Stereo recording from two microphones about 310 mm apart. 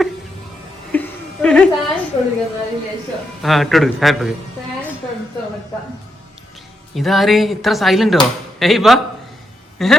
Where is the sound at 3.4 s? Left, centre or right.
Centre.